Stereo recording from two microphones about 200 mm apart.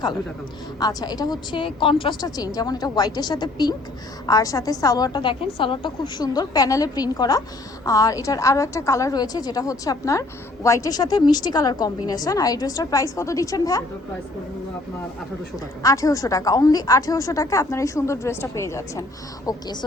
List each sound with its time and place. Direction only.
0.8 s a woman's voice: 20° left (ahead or behind)
15.8 s a woman's voice: 15° left (ahead or behind)